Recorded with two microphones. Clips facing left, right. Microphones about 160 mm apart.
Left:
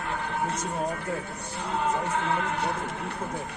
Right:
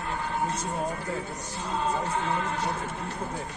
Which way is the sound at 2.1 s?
60° left (ahead or behind).